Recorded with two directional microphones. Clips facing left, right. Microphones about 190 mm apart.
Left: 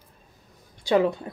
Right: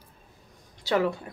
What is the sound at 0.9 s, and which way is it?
Speech, 20° left (ahead or behind).